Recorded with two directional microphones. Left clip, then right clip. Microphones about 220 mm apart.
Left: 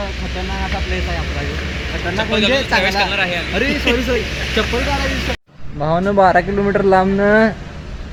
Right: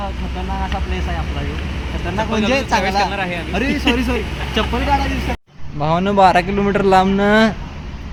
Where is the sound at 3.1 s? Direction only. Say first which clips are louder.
Left 4 dB; 40° right (ahead or behind).